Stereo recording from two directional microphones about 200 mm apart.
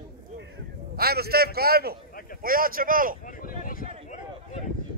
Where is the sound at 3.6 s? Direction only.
45° left (ahead or behind).